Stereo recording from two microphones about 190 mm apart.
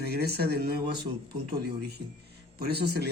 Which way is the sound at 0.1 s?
55° right (ahead or behind).